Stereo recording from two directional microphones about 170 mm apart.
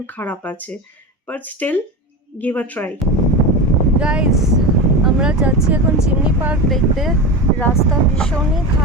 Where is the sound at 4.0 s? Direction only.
5° right (ahead or behind).